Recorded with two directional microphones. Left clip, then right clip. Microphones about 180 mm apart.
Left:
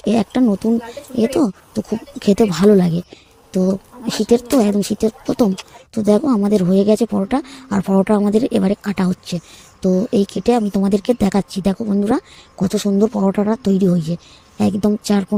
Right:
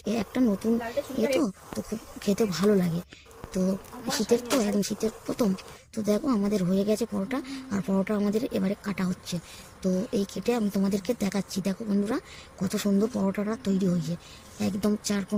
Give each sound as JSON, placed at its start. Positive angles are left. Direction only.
{"t": 0.0, "sound": "speech", "side_deg": 45}